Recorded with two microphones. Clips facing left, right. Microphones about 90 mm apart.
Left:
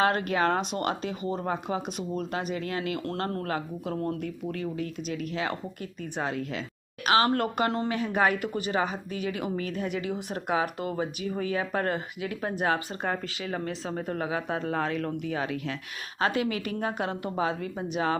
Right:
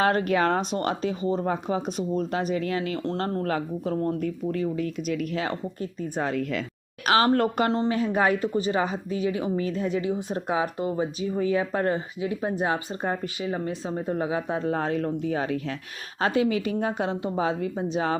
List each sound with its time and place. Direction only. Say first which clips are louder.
0.0 s speech: right 3 dB; 40° right (ahead or behind)
2.6 s speech: right 5 dB; 40° left (ahead or behind)
3.0 s speech: right 4 dB; 25° right (ahead or behind)
3.4 s speech: right 4 dB; 35° right (ahead or behind)
7.7 s speech: right 4 dB; 30° right (ahead or behind)